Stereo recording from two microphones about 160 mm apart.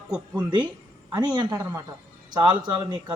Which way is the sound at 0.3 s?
30° right (ahead or behind).